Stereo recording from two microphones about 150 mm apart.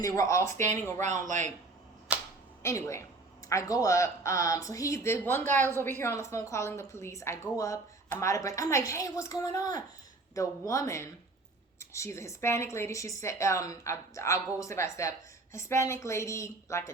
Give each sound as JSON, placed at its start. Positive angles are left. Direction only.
{"t": 0.0, "sound": "a woman's voice", "side_deg": 20}
{"t": 1.0, "sound": "speech", "side_deg": -55}
{"t": 2.1, "sound": "a sound", "side_deg": -10}
{"t": 2.6, "sound": "a woman's voice", "side_deg": 20}